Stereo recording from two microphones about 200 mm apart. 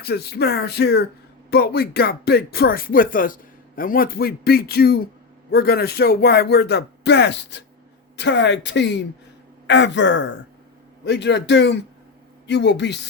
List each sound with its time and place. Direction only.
0.0 s speech: 50° left (ahead or behind)